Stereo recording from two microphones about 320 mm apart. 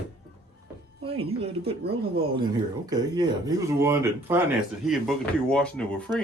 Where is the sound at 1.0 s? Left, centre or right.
Centre.